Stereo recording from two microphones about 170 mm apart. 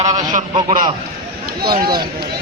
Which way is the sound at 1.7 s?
25° right (ahead or behind).